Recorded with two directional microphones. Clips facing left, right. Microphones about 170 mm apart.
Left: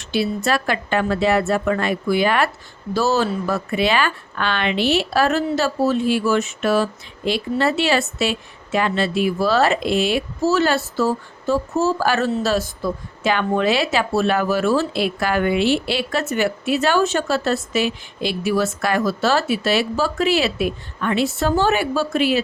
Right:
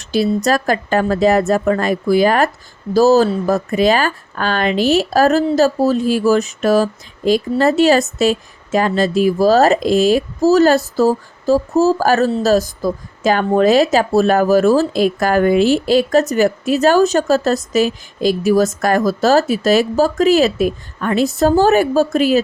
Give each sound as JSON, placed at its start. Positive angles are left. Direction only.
{"t": 0.0, "sound": "speech", "side_deg": -40}